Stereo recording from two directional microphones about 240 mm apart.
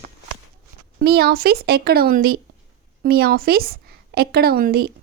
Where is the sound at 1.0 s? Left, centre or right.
Right.